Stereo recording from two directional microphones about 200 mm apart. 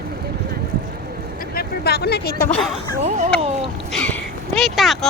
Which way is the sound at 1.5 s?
50° left (ahead or behind).